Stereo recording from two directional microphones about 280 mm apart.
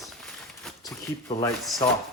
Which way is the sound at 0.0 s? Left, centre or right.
Centre.